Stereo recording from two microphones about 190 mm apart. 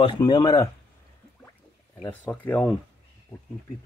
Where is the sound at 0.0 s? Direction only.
25° left (ahead or behind).